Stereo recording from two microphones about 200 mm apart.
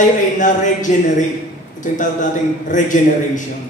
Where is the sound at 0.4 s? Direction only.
40° left (ahead or behind).